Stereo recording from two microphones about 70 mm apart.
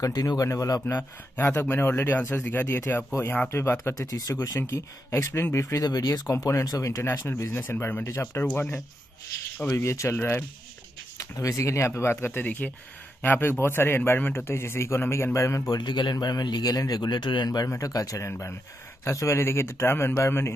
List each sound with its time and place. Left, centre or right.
0.0 s speech: left
0.8 s a man's voice: left
4.1 s speech: left
4.6 s a man's voice: left
11.1 s a man's voice: left
15.7 s a man's voice: left
16.7 s speech: left
17.6 s a man's voice: left